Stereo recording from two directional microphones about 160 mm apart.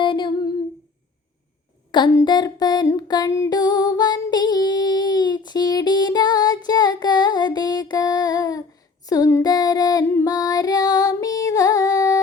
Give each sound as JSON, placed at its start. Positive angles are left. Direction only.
{"t": 0.0, "sound": "humming", "side_deg": 30}
{"t": 1.9, "sound": "a sound", "side_deg": 25}
{"t": 9.0, "sound": "female singing", "side_deg": 20}